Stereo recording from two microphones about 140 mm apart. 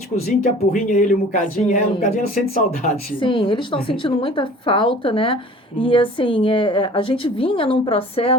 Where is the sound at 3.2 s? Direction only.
35° left (ahead or behind).